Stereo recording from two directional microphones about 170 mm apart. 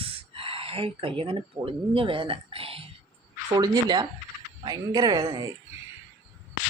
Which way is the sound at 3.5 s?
25° right (ahead or behind).